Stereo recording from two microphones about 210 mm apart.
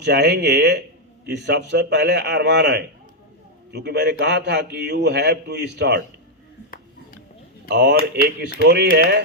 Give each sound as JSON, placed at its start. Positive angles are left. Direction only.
{"t": 0.0, "sound": "a man's voice", "side_deg": -55}
{"t": 7.7, "sound": "a man's voice", "side_deg": -55}